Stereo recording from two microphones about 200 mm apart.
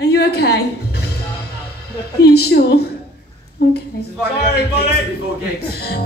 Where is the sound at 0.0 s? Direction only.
55° left (ahead or behind).